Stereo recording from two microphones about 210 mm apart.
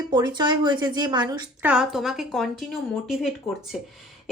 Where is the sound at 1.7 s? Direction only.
Centre (ahead or behind).